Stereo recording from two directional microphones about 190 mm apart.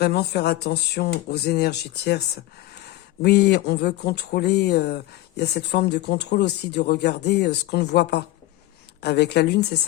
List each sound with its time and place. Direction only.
0.0 s speech: 60° left (ahead or behind)